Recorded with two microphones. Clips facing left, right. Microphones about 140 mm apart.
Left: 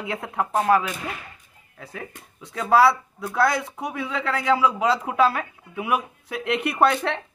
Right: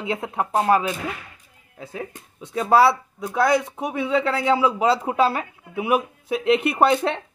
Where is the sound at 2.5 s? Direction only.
25° right (ahead or behind).